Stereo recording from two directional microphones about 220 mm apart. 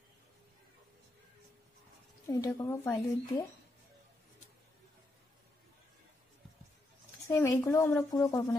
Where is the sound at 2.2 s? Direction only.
15° left (ahead or behind).